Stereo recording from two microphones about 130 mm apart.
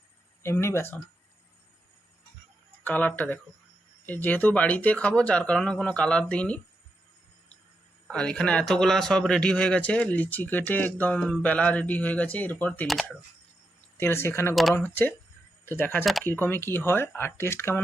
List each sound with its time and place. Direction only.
0.4 s speech: 20° left (ahead or behind)
2.8 s speech: 15° left (ahead or behind)
8.0 s speech: 5° left (ahead or behind)
12.9 s speech: centre (ahead or behind)
14.0 s speech: 20° left (ahead or behind)
14.5 s speech: centre (ahead or behind)
14.8 s speech: 15° left (ahead or behind)